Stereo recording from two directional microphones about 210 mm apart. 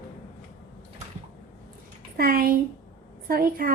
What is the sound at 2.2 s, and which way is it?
A woman's voice, 45° right (ahead or behind).